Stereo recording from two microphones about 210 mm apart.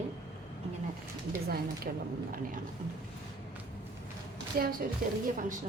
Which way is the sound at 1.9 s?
40° right (ahead or behind).